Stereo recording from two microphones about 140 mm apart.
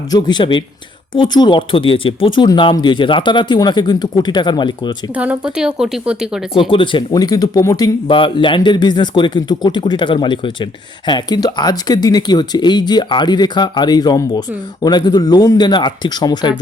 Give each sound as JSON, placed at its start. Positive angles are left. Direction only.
{"t": 0.1, "sound": "a man's voice", "side_deg": 30}
{"t": 5.1, "sound": "speech", "side_deg": -10}
{"t": 6.6, "sound": "speech", "side_deg": 40}
{"t": 8.0, "sound": "a man's voice", "side_deg": 35}